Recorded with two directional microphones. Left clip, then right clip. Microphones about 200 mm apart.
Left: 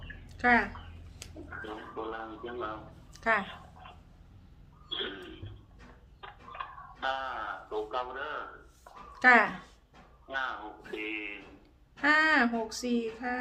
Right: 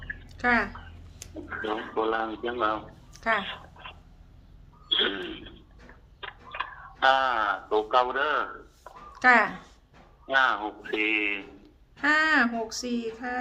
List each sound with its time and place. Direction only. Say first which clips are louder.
0.3 s speech: right 1 dB; 10° right (ahead or behind)
1.6 s speech: right 12 dB; 60° right (ahead or behind)
3.1 s a sound: right 2 dB; 5° right (ahead or behind)
3.4 s a sound: right 7 dB; 60° right (ahead or behind)
4.9 s a sound: right 11 dB; 55° right (ahead or behind)
6.1 s speech: right 7 dB; 60° right (ahead or behind)
9.1 s speech: right 2 dB; 5° right (ahead or behind)
10.2 s speech: right 12 dB; 55° right (ahead or behind)
12.0 s speech: right 2 dB; 5° right (ahead or behind)